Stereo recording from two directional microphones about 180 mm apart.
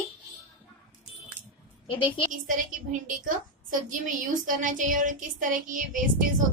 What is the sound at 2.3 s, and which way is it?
A woman's voice, 45° right (ahead or behind).